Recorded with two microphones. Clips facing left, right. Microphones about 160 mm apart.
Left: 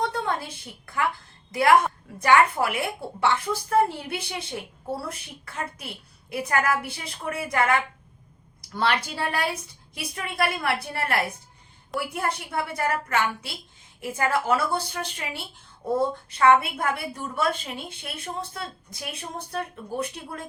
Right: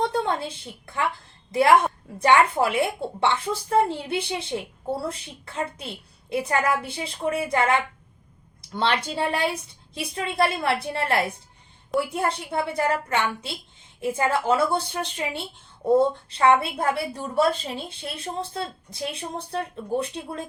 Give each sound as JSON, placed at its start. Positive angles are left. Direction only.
{"t": 0.0, "sound": "a woman's voice", "side_deg": -25}
{"t": 2.2, "sound": "a woman's voice", "side_deg": -25}